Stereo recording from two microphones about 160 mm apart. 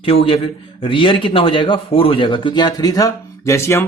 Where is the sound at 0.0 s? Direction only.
35° left (ahead or behind).